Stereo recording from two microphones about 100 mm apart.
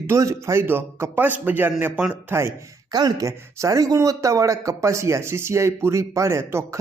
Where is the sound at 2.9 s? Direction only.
40° right (ahead or behind).